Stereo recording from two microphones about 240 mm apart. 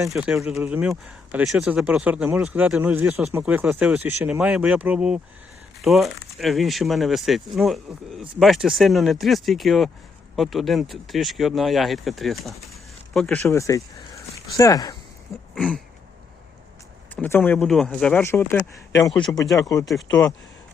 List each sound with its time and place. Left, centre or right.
0.1 s speech: centre
15.5 s a sound: centre
17.2 s speech: centre